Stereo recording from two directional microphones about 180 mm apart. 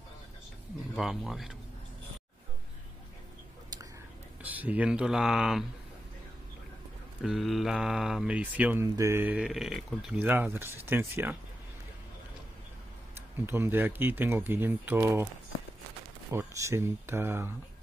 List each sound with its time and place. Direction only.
0.9 s speech: centre (ahead or behind)
4.4 s speech: 10° right (ahead or behind)
7.2 s speech: centre (ahead or behind)
13.5 s speech: 10° right (ahead or behind)
16.3 s speech: 15° right (ahead or behind)